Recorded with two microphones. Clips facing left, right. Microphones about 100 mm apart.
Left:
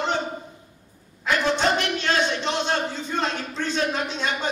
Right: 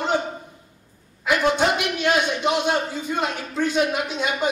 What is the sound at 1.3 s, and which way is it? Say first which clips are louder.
A man's voice: right 2 dB; 10° right (ahead or behind).